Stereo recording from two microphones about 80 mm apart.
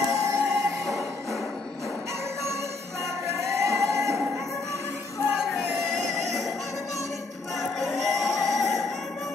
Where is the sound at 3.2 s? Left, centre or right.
Right.